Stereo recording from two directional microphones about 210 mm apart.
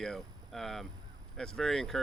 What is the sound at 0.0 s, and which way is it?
Speech, centre (ahead or behind).